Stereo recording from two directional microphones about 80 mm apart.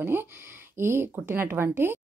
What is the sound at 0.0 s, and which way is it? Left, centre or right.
A woman's voice, right.